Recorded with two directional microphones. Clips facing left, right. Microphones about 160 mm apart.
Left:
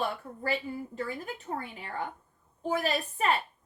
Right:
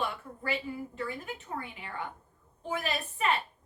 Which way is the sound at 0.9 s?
40° left (ahead or behind).